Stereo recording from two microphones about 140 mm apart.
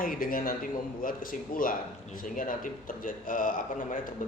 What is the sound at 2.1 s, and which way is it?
A man's voice, 75° left (ahead or behind).